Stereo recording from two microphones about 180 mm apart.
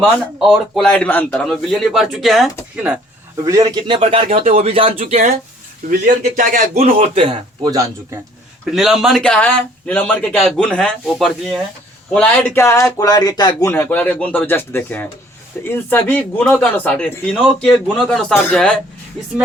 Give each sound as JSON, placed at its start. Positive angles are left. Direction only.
{"t": 0.0, "sound": "a man's voice", "side_deg": 0}
{"t": 3.4, "sound": "speech", "side_deg": -20}
{"t": 5.9, "sound": "speech", "side_deg": -50}
{"t": 6.7, "sound": "speech", "side_deg": -35}
{"t": 7.6, "sound": "speech", "side_deg": -20}
{"t": 8.7, "sound": "a man's voice", "side_deg": 0}